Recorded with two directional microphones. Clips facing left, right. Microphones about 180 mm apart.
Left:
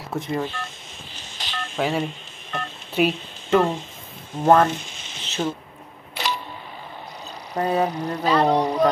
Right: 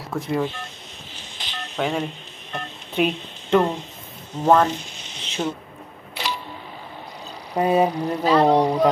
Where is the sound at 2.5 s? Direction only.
5° left (ahead or behind).